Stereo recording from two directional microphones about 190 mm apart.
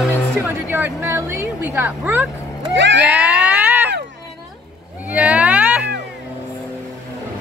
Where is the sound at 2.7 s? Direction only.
70° right (ahead or behind).